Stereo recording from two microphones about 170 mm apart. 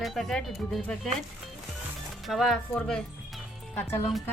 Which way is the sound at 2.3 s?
Centre (ahead or behind).